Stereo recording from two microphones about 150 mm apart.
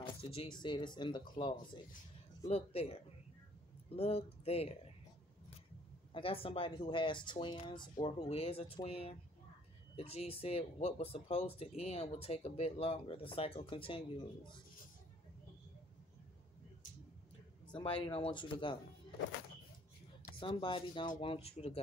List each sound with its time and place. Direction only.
0.0 s speech: 40° left (ahead or behind)
2.4 s speech: 40° left (ahead or behind)
6.1 s speech: 40° left (ahead or behind)
17.6 s speech: 35° left (ahead or behind)
20.3 s speech: 35° left (ahead or behind)